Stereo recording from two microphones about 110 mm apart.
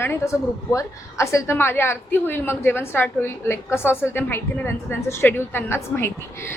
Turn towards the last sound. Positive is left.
turn(degrees=20)  # may be behind; listen again after turning